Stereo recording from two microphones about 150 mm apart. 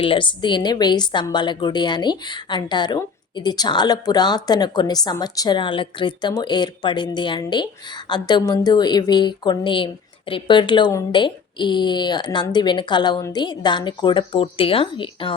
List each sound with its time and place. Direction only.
0.0 s a woman's voice: 35° left (ahead or behind)